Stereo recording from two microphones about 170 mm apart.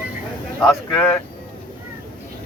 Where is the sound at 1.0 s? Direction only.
10° left (ahead or behind).